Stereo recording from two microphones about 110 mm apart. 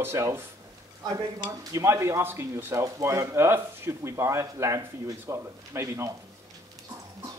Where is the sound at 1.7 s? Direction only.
25° right (ahead or behind).